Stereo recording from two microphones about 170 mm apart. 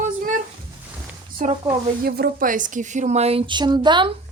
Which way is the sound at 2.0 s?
65° right (ahead or behind).